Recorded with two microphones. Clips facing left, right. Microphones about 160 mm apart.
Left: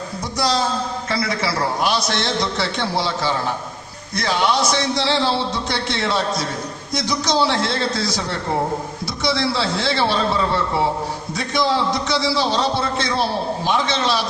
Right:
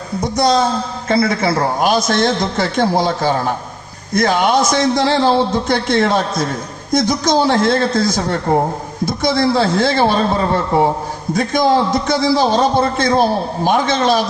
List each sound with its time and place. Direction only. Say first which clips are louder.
0.3 s a man's voice: right 6 dB; 45° right (ahead or behind)